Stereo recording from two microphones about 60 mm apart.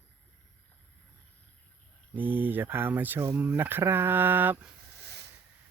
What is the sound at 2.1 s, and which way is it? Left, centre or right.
Speech, right.